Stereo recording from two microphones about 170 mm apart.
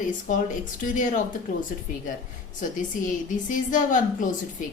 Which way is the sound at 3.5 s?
50° left (ahead or behind).